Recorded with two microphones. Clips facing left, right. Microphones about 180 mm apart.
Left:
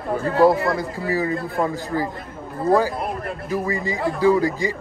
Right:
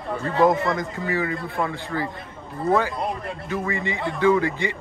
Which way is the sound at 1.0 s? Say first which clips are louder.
Left 3 dB; 35° left (ahead or behind).